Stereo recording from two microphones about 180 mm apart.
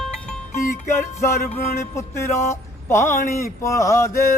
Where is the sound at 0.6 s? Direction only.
15° left (ahead or behind).